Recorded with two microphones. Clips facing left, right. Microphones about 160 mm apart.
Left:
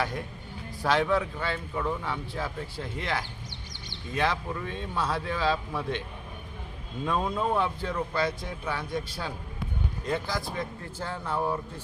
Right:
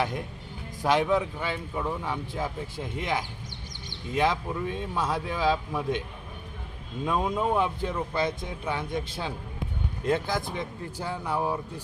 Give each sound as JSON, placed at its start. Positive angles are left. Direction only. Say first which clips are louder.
{"t": 0.8, "sound": "a man's voice", "louder": "right 1 dB", "side_deg": -15}
{"t": 7.0, "sound": "a man's voice", "louder": "right 1 dB", "side_deg": -15}
{"t": 10.3, "sound": "a man's voice", "louder": "right 2 dB", "side_deg": -20}